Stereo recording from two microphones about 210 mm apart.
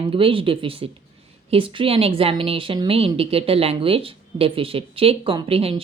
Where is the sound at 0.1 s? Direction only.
25° right (ahead or behind).